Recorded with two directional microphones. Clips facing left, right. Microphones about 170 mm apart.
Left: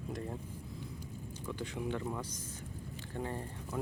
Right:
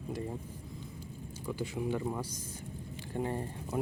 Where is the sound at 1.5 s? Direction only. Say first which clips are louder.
Right 4 dB; 5° right (ahead or behind).